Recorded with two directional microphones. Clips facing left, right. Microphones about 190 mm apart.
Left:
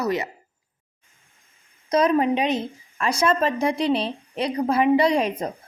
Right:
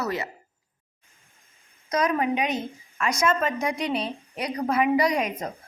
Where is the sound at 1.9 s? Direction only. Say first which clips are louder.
Left 5 dB; 30° left (ahead or behind).